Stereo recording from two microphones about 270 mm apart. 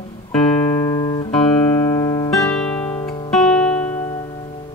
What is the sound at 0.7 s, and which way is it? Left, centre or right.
Music, centre.